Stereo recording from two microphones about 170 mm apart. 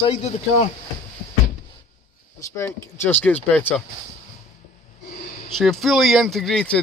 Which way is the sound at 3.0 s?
10° left (ahead or behind).